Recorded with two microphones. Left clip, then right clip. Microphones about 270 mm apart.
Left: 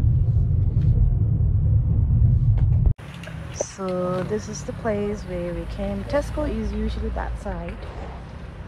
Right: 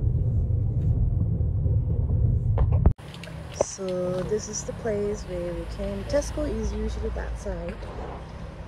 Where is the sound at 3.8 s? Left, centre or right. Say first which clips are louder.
Left 3 dB; centre.